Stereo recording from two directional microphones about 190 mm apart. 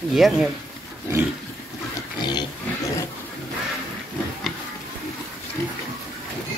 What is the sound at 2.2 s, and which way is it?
Dog, 20° left (ahead or behind).